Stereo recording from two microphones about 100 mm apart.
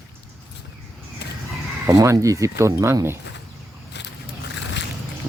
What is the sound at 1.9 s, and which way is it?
Speech, 30° right (ahead or behind).